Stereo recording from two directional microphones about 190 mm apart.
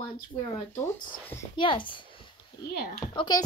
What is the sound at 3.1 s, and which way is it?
Speech, 20° left (ahead or behind).